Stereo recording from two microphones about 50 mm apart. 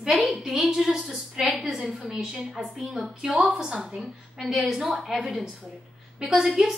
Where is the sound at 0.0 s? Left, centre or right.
Centre.